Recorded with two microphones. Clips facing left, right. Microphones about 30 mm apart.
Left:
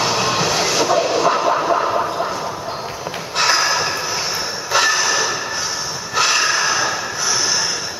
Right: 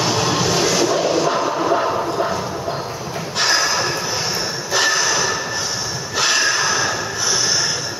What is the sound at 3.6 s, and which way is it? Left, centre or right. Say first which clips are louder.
Snort: left 1 dB; centre.